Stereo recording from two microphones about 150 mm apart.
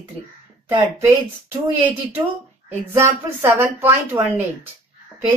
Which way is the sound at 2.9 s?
15° right (ahead or behind).